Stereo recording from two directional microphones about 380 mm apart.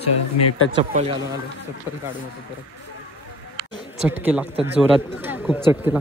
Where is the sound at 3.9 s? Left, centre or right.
Centre.